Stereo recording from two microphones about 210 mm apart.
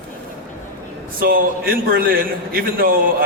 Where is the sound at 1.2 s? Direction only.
45° right (ahead or behind).